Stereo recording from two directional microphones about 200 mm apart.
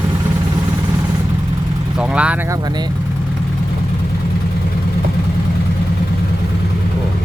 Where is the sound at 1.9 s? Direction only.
5° right (ahead or behind).